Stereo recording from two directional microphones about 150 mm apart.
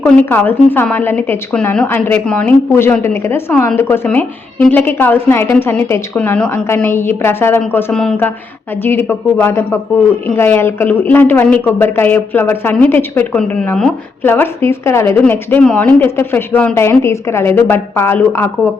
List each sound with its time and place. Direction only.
0.3 s speech: 15° left (ahead or behind)